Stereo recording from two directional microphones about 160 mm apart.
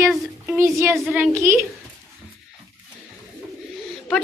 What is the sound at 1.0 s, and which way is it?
Speech, 5° right (ahead or behind).